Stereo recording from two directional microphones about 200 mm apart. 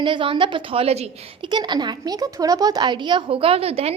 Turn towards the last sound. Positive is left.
turn(degrees=-30)  # may be behind; listen again after turning